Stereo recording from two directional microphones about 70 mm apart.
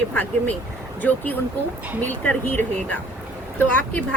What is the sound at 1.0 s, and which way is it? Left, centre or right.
Speech, left.